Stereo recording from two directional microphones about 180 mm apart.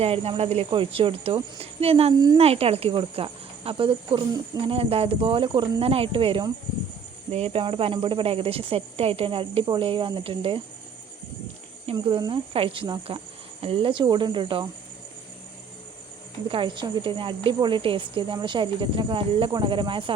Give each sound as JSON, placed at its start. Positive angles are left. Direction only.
{"t": 0.0, "sound": "speech", "side_deg": -35}
{"t": 11.9, "sound": "a woman's voice", "side_deg": -25}
{"t": 16.5, "sound": "a woman's voice", "side_deg": -25}